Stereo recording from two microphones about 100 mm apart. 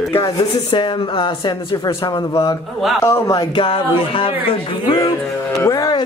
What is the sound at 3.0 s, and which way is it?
Speech, 30° left (ahead or behind).